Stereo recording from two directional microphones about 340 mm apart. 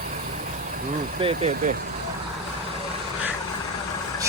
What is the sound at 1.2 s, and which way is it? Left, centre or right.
Speech, centre.